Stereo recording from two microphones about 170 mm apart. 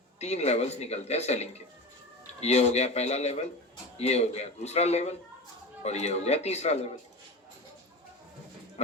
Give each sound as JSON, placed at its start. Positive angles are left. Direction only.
{"t": 0.2, "sound": "speech", "side_deg": 40}